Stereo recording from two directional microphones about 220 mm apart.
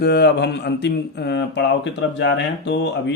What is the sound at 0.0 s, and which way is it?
Speech, 50° left (ahead or behind).